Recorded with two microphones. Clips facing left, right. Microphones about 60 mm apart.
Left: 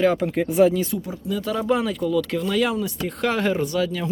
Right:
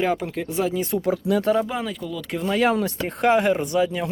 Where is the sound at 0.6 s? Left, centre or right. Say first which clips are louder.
Left 5 dB; centre.